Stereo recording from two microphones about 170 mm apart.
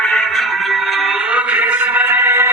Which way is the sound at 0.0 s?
5° left (ahead or behind).